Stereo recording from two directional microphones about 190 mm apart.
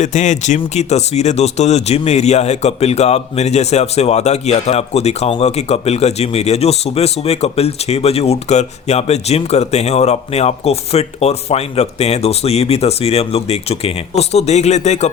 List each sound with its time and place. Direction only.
0.0 s speech: 40° left (ahead or behind)